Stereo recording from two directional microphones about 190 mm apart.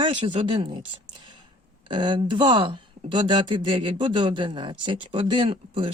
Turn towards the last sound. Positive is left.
turn(degrees=-25)  # may be behind; listen again after turning